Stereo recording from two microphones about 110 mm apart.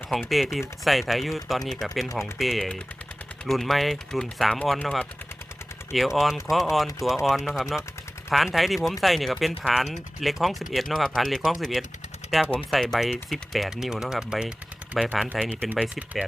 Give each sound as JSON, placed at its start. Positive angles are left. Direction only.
{"t": 0.1, "sound": "speech", "side_deg": 0}
{"t": 5.9, "sound": "speech", "side_deg": 0}
{"t": 15.4, "sound": "speech", "side_deg": 10}
{"t": 15.8, "sound": "speech", "side_deg": -10}